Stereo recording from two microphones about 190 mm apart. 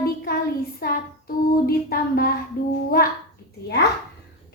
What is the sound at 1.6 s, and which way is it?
Music, 50° left (ahead or behind).